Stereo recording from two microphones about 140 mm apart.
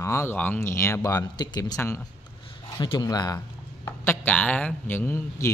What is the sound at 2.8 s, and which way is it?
Speech, 30° left (ahead or behind).